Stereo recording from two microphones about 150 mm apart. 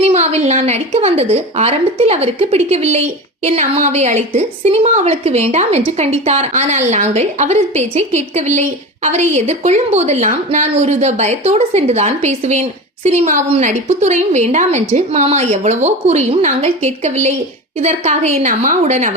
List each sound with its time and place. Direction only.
0.0 s a woman's voice: 45° right (ahead or behind)